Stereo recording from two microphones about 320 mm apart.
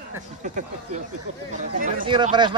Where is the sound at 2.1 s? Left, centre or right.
Centre.